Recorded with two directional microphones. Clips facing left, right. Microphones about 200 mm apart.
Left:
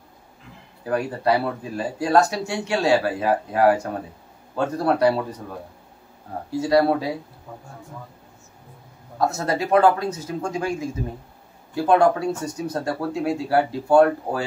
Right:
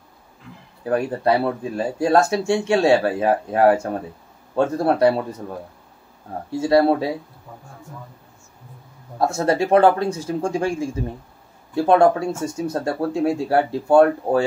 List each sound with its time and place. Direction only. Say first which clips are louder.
0.8 s speech: right 2 dB; 25° right (ahead or behind)
6.5 s speech: right 2 dB; 25° right (ahead or behind)
9.2 s speech: right 4 dB; 30° right (ahead or behind)